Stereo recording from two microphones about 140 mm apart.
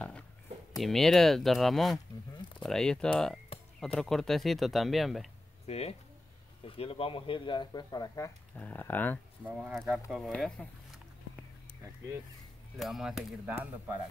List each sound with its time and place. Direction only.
0.7 s speech: centre (ahead or behind)
5.7 s speech: 45° left (ahead or behind); by 8.3 s 30° left (ahead or behind)
8.5 s speech: 15° left (ahead or behind)
9.4 s speech: 10° right (ahead or behind); by 10.7 s 10° left (ahead or behind)
12.7 s speech: centre (ahead or behind)